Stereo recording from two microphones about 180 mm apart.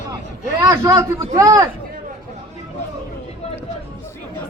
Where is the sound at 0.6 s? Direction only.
20° right (ahead or behind).